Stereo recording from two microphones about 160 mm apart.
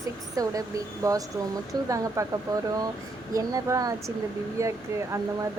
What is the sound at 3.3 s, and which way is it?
Speech, 20° right (ahead or behind).